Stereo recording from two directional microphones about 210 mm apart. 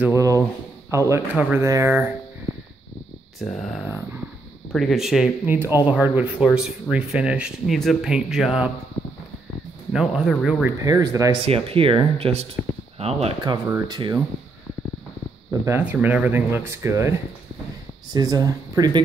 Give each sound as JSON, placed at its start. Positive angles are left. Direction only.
{"t": 0.0, "sound": "speech", "side_deg": -15}
{"t": 3.3, "sound": "speech", "side_deg": 0}
{"t": 9.9, "sound": "speech", "side_deg": 0}
{"t": 10.8, "sound": "speech", "side_deg": -15}
{"t": 11.4, "sound": "speech", "side_deg": -25}
{"t": 15.6, "sound": "speech", "side_deg": -10}
{"t": 18.1, "sound": "speech", "side_deg": -20}